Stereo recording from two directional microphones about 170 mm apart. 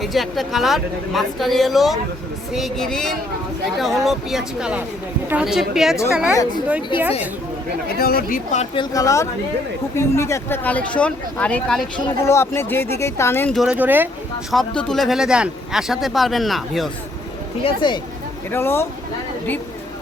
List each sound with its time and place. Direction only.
0.0 s speech: centre (ahead or behind)
7.9 s speech: 65° left (ahead or behind)
8.7 s speech: 25° left (ahead or behind)
13.5 s speech: 5° right (ahead or behind)
14.5 s speech: 5° left (ahead or behind)
17.7 s speech: 25° left (ahead or behind)
18.5 s speech: 15° left (ahead or behind)